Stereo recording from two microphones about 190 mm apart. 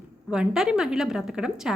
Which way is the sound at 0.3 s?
5° right (ahead or behind).